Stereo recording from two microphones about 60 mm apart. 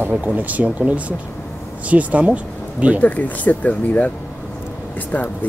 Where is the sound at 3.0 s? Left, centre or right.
Left.